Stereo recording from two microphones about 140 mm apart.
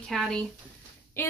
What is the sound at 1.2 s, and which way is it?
Speech, 15° left (ahead or behind).